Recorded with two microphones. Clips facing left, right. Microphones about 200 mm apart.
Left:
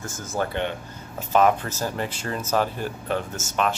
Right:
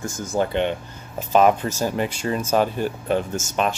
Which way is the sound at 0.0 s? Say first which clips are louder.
Right 5 dB; 15° right (ahead or behind).